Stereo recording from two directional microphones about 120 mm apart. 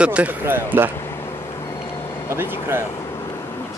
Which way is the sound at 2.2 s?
20° right (ahead or behind).